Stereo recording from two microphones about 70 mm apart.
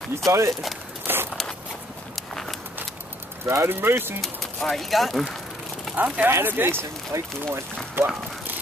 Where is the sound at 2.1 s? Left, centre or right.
Centre.